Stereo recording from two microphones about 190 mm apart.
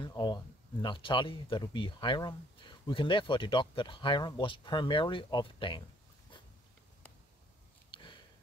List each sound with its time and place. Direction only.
0.0 s speech: 20° left (ahead or behind)
7.9 s sniff: 25° left (ahead or behind)